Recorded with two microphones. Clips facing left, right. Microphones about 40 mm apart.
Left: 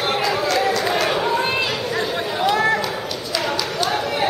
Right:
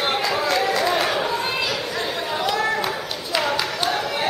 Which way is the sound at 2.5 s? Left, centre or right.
Centre.